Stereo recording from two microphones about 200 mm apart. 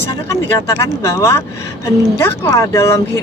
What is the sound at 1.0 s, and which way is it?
Speech, 15° left (ahead or behind).